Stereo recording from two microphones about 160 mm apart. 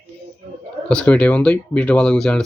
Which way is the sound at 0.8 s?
5° left (ahead or behind).